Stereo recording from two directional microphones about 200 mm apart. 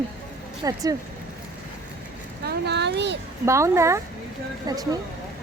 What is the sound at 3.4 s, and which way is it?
A woman's voice, 15° right (ahead or behind).